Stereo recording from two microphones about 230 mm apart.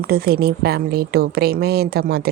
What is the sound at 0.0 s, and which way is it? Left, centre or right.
A woman's voice, right.